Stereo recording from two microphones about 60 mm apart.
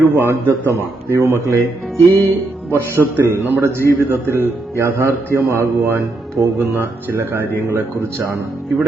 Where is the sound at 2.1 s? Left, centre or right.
Left.